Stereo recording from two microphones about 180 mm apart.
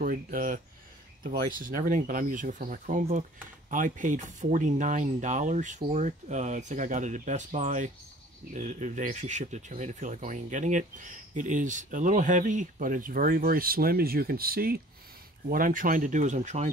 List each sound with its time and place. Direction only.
0.0 s speech: 50° right (ahead or behind)